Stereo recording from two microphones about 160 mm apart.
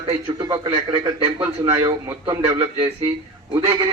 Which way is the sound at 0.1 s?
25° right (ahead or behind).